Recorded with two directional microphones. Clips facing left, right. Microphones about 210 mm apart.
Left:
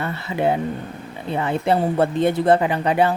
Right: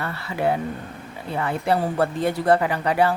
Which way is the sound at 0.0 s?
20° left (ahead or behind).